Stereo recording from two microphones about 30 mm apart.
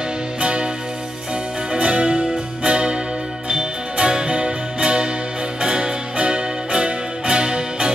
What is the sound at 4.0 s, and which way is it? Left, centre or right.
Music, right.